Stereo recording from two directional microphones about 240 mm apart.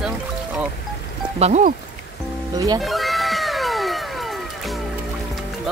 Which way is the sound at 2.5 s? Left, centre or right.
Centre.